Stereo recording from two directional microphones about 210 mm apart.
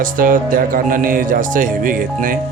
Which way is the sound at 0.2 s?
40° right (ahead or behind).